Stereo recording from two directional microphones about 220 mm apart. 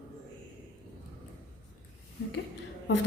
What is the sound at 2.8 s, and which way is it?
Speech, 55° left (ahead or behind).